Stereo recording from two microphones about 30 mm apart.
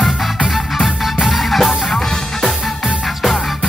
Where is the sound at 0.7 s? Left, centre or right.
Centre.